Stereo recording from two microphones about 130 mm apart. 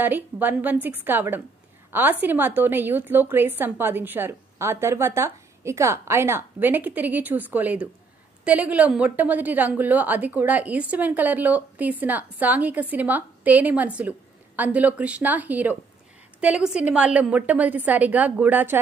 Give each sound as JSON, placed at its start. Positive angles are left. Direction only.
{"t": 0.0, "sound": "a woman's voice", "side_deg": -15}